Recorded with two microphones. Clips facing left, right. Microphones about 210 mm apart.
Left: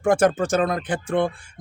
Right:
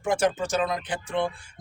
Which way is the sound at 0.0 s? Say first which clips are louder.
Left 6 dB; 55° left (ahead or behind).